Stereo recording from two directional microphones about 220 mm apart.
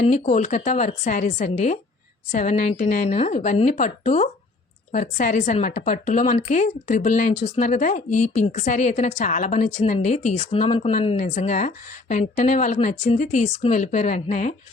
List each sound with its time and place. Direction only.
0.0 s speech: 35° left (ahead or behind)